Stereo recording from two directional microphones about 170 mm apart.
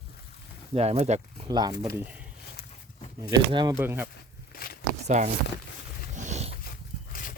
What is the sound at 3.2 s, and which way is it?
Speech, 25° right (ahead or behind).